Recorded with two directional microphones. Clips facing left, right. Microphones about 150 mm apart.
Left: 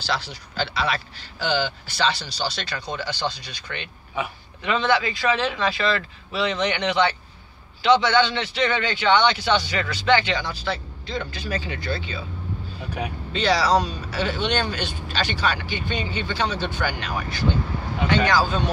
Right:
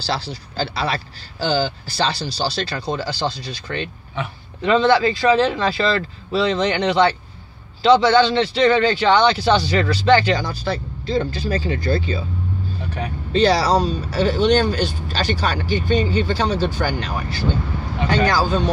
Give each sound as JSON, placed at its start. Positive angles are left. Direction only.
{"t": 0.0, "sound": "speech", "side_deg": -30}
{"t": 4.2, "sound": "speech", "side_deg": 10}
{"t": 4.6, "sound": "speech", "side_deg": -30}
{"t": 13.3, "sound": "speech", "side_deg": -35}